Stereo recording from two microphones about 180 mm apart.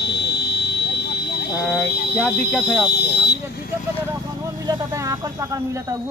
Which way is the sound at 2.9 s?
65° left (ahead or behind).